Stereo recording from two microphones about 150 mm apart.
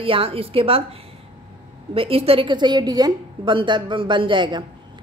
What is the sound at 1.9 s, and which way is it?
A woman's voice, 40° right (ahead or behind).